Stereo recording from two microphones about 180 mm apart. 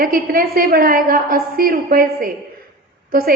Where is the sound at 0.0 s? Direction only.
55° right (ahead or behind).